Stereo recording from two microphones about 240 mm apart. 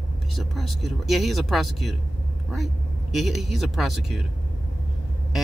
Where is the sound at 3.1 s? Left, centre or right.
Centre.